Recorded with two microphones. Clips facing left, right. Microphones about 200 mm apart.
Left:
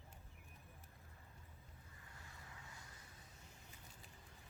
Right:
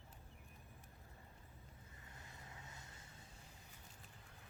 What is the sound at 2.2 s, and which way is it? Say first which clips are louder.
Vehicle: right 1 dB; 20° right (ahead or behind).